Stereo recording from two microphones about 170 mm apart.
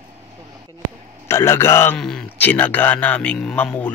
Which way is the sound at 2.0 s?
5° left (ahead or behind).